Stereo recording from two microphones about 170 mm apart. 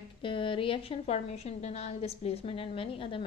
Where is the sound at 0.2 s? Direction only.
30° left (ahead or behind).